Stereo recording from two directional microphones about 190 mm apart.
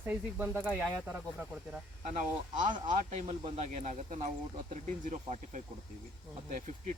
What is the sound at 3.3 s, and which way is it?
Speech, 35° right (ahead or behind).